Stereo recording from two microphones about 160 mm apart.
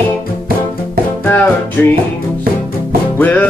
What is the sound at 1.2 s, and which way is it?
Music, 15° left (ahead or behind).